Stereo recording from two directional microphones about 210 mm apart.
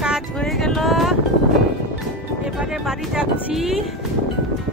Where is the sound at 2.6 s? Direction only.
5° right (ahead or behind).